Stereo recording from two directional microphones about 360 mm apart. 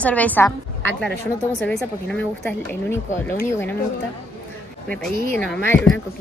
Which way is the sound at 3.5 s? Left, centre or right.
Centre.